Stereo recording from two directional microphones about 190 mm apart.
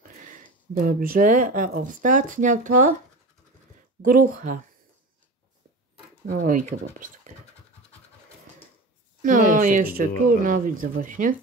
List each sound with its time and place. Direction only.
0.8 s speech: 50° right (ahead or behind)
4.0 s speech: 45° right (ahead or behind)
6.2 s speech: 45° right (ahead or behind)
9.2 s speech: 45° right (ahead or behind)